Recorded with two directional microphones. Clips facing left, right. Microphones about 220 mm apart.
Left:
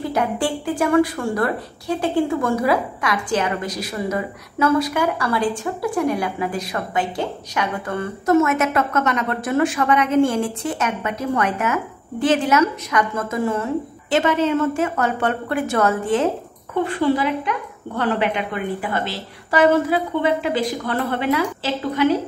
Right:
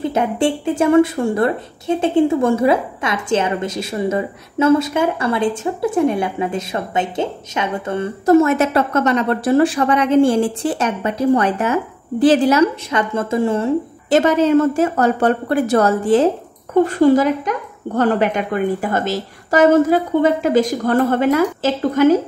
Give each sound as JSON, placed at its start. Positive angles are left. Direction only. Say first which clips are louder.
{"t": 0.0, "sound": "a woman's voice", "louder": "right 4 dB", "side_deg": -25}
{"t": 14.1, "sound": "a woman's voice", "louder": "right 5 dB", "side_deg": -40}